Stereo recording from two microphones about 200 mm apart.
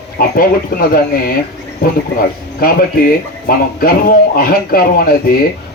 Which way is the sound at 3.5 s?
45° left (ahead or behind).